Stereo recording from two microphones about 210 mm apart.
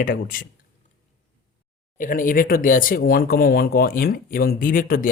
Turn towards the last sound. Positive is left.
turn(degrees=40)  # may be behind; listen again after turning